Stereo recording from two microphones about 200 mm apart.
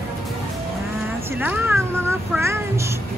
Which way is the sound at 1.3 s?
10° right (ahead or behind).